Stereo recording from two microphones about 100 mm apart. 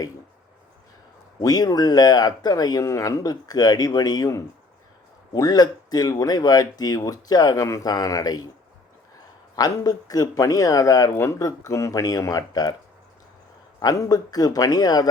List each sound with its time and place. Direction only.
1.4 s speech: 40° left (ahead or behind)
9.6 s speech: 40° left (ahead or behind)
13.7 s speech: 35° left (ahead or behind)